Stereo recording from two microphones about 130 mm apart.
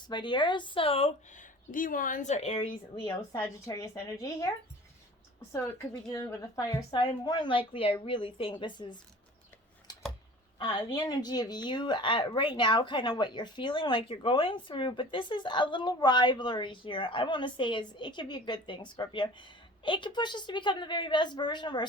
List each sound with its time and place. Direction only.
0.1 s a woman's voice: 35° left (ahead or behind)
1.4 s speech: 90° left; by 2.6 s 50° left (ahead or behind)
2.9 s a woman's voice: 40° left (ahead or behind)
3.7 s a woman's voice: 20° left (ahead or behind); by 8.9 s 35° left (ahead or behind)
10.6 s a woman's voice: 30° left (ahead or behind)